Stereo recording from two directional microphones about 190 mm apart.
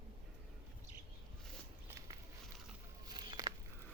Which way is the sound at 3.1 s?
25° right (ahead or behind).